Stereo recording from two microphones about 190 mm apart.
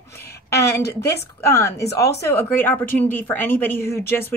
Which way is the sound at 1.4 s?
15° left (ahead or behind).